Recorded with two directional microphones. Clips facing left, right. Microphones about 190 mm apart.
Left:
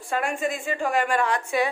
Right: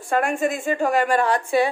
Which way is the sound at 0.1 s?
45° right (ahead or behind).